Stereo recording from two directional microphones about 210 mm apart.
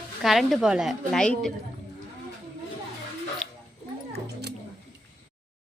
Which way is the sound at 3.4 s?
Centre (ahead or behind).